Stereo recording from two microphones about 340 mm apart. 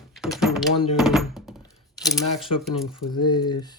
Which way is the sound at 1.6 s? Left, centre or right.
Centre.